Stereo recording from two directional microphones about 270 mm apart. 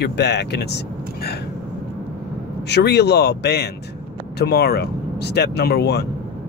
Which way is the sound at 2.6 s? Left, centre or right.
Left.